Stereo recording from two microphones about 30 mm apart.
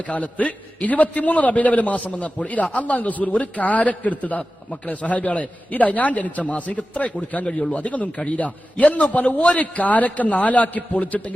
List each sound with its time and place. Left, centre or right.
0.1 s a man's voice: left
7.3 s a man's voice: left